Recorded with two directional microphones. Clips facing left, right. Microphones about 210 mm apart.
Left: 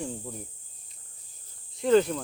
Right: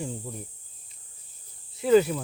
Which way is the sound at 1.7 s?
5° right (ahead or behind).